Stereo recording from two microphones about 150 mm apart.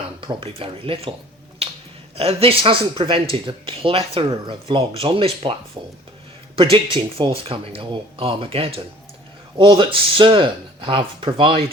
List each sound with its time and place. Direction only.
0.2 s speech: 35° right (ahead or behind)
2.1 s speech: 40° right (ahead or behind)
6.6 s speech: 35° right (ahead or behind)